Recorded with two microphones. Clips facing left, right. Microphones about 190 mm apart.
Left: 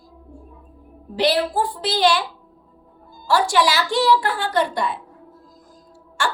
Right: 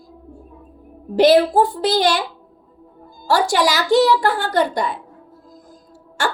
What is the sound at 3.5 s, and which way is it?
A woman's voice, 40° right (ahead or behind).